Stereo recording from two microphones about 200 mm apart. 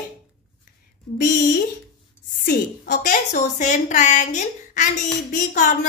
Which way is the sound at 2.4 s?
50° left (ahead or behind).